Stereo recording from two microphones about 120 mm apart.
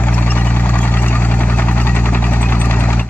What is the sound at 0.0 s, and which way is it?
Vehicle, 15° left (ahead or behind).